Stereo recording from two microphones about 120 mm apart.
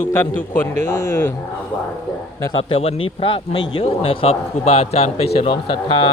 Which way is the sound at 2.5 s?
55° left (ahead or behind).